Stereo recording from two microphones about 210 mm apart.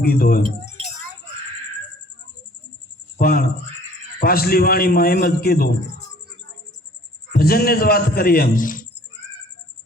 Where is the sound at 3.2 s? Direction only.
45° left (ahead or behind).